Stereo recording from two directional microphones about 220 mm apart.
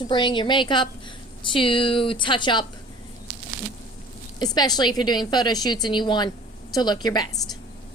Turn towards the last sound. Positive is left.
turn(degrees=20)  # may be behind; listen again after turning